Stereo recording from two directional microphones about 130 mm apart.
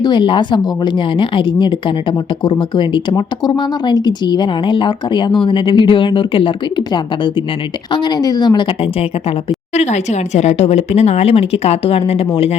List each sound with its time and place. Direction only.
0.0 s a woman's voice: 35° left (ahead or behind)
9.5 s speech: 60° left (ahead or behind)